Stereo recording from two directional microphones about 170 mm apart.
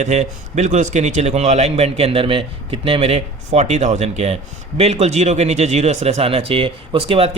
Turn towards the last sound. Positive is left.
turn(degrees=-35)  # may be behind; listen again after turning